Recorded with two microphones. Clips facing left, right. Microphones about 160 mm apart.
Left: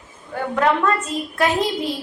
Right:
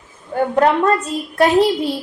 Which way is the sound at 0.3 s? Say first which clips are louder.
Right 5 dB; 35° right (ahead or behind).